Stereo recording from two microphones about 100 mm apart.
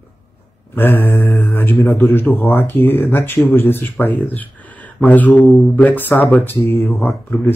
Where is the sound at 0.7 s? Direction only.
25° left (ahead or behind).